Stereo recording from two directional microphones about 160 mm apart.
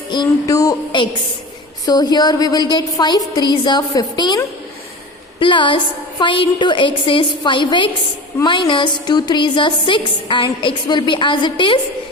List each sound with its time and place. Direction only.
0.1 s a woman's voice: 25° left (ahead or behind)
5.4 s a woman's voice: 30° left (ahead or behind)